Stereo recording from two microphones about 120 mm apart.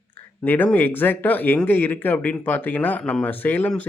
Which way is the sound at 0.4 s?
15° left (ahead or behind).